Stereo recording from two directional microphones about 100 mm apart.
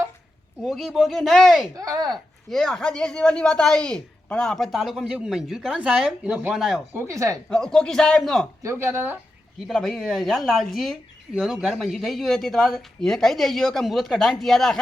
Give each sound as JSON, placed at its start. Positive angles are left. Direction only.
{"t": 0.6, "sound": "speech", "side_deg": -5}
{"t": 1.7, "sound": "speech", "side_deg": -35}
{"t": 2.0, "sound": "speech", "side_deg": 0}
{"t": 6.9, "sound": "speech", "side_deg": -30}
{"t": 7.5, "sound": "speech", "side_deg": 5}
{"t": 8.6, "sound": "speech", "side_deg": -25}
{"t": 9.6, "sound": "speech", "side_deg": 5}